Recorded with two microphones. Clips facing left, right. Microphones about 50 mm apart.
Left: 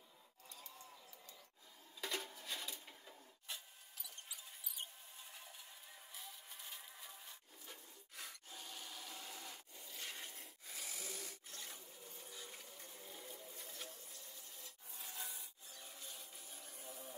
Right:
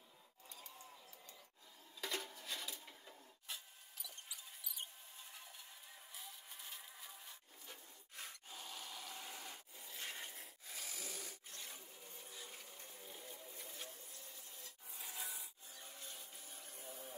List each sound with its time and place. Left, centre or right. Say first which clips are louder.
2.0 s printer: even; centre
6.1 s insect: even; centre
9.8 s a sound: right 2 dB; centre
14.6 s rub: right 1 dB; centre
15.8 s a sound: right 1 dB; right
16.2 s water: even; centre